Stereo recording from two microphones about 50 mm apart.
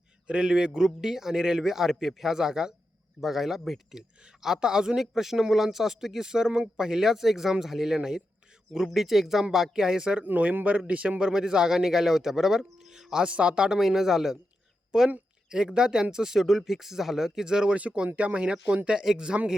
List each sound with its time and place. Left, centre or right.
0.3 s speech: centre
10.2 s speech: right; by 19.4 s centre